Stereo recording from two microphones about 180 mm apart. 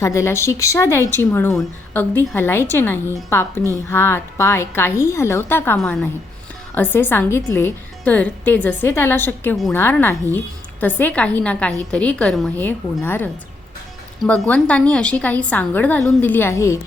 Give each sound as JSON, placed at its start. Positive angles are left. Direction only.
{"t": 0.0, "sound": "a woman's voice", "side_deg": 15}